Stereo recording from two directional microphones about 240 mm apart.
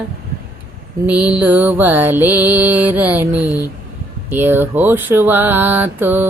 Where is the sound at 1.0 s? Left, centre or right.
Centre.